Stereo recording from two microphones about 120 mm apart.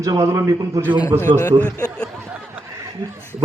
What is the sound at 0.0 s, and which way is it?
Speech, 25° right (ahead or behind).